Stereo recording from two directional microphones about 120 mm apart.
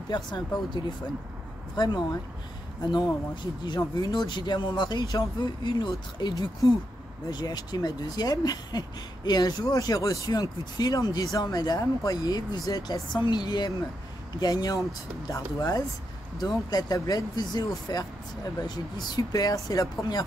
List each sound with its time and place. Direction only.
0.1 s speech: 35° left (ahead or behind)